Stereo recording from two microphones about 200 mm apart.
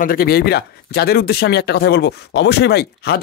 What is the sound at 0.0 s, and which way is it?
Speech, 50° left (ahead or behind).